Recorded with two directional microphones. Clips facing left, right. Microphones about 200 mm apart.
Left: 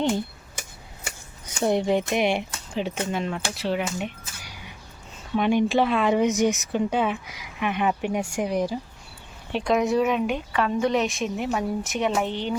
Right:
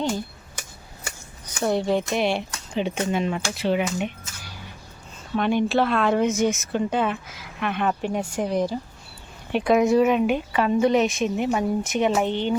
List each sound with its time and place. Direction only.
1.5 s speech: 20° left (ahead or behind)
2.7 s speech: centre (ahead or behind)
5.4 s speech: 10° left (ahead or behind)
9.5 s speech: 5° right (ahead or behind)